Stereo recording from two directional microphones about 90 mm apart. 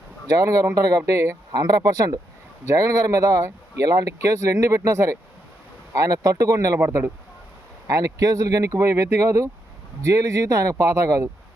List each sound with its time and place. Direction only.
0.3 s speech: 40° right (ahead or behind)
1.5 s speech: 45° right (ahead or behind)
6.7 s speech: 25° right (ahead or behind)
7.9 s speech: 40° right (ahead or behind)